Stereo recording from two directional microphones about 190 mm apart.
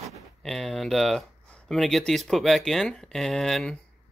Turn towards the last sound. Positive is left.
turn(degrees=0)  # may be behind; listen again after turning